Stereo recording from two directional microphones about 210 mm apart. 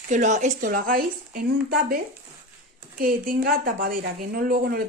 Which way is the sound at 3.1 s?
45° right (ahead or behind).